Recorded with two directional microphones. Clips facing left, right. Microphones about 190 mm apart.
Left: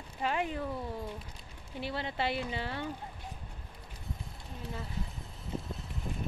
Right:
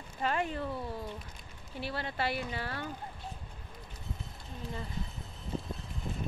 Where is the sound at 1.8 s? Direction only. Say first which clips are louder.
Left 1 dB; 20° left (ahead or behind).